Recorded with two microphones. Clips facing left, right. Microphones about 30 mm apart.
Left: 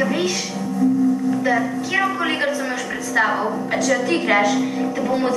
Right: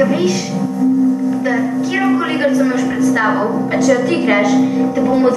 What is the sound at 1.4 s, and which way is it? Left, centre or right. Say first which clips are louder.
A woman's voice: right 4 dB; centre.